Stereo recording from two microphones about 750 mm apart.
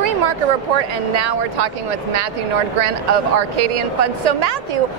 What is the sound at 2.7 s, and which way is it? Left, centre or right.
A woman's voice, right.